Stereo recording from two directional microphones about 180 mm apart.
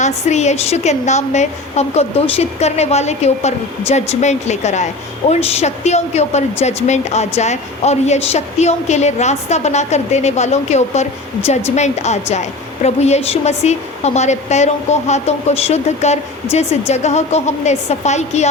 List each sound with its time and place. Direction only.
0.0 s a woman's voice: 40° left (ahead or behind)